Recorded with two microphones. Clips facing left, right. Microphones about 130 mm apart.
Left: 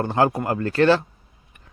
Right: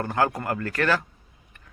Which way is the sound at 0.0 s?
25° left (ahead or behind).